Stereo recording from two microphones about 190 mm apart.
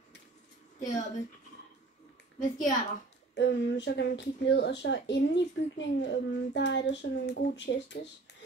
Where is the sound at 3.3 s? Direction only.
65° left (ahead or behind).